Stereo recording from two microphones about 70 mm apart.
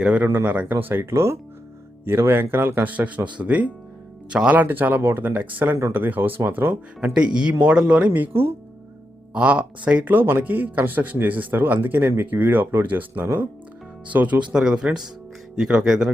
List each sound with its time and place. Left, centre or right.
0.0 s speech: centre; by 2.8 s right
2.8 s speech: right
4.6 s speech: right
7.0 s speech: centre; by 8.5 s right
9.3 s speech: centre